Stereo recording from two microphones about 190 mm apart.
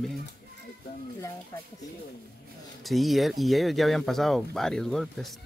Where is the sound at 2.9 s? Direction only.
Centre (ahead or behind).